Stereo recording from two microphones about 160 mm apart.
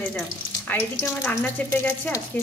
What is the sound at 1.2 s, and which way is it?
Speech, 10° left (ahead or behind).